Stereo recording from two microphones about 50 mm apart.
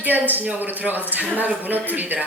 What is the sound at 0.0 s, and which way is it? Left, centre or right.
Speech, right.